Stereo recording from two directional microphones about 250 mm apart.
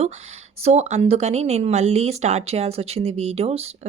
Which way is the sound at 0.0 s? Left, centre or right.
Right.